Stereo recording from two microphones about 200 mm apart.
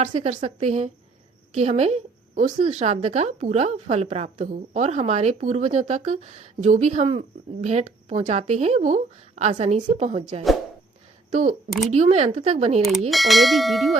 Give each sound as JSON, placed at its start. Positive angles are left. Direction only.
{"t": 0.1, "sound": "a woman's voice", "side_deg": -35}
{"t": 11.3, "sound": "a woman's voice", "side_deg": -35}
{"t": 13.1, "sound": "bell", "side_deg": 0}